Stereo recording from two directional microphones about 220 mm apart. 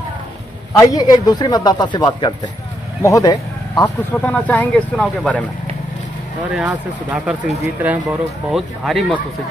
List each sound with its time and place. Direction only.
0.7 s speech: 15° left (ahead or behind)
4.2 s speech: 5° left (ahead or behind)
6.5 s speech: 5° right (ahead or behind)